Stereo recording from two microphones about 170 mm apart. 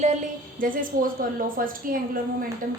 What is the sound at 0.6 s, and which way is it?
A woman's voice, 55° right (ahead or behind).